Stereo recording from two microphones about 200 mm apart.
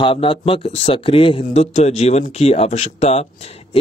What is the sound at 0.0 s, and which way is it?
Speech, 25° left (ahead or behind).